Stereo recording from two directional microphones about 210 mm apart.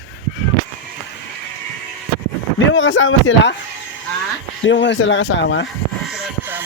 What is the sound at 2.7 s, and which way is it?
Speech, 65° left (ahead or behind).